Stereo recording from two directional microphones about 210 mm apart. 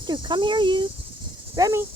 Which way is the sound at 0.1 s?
20° right (ahead or behind).